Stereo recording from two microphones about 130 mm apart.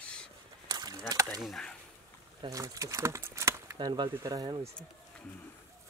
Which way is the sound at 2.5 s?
25° right (ahead or behind).